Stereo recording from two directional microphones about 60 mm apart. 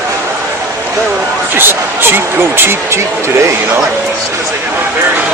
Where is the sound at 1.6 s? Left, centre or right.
Right.